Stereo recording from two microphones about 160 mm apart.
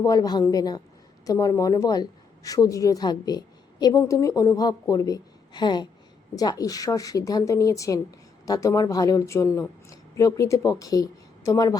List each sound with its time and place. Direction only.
0.0 s a woman's voice: 25° left (ahead or behind)